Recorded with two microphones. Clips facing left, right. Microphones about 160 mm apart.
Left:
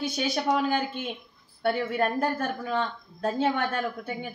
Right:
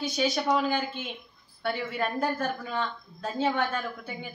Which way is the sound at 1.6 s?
45° left (ahead or behind).